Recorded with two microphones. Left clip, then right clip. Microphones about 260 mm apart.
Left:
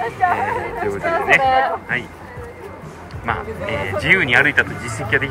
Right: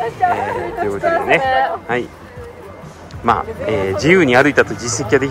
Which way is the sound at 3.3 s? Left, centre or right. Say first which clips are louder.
Right 6 dB; right.